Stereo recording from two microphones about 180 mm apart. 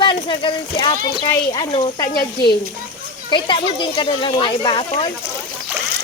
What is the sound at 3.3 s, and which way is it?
Speech, 25° left (ahead or behind).